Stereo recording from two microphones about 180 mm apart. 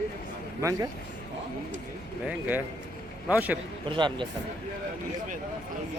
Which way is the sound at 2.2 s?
10° right (ahead or behind).